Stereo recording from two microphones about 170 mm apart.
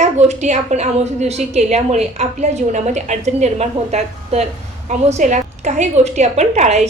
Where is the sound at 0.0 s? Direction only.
40° right (ahead or behind).